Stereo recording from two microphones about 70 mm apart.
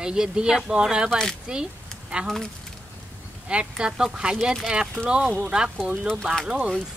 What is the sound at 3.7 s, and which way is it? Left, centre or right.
Speech, centre.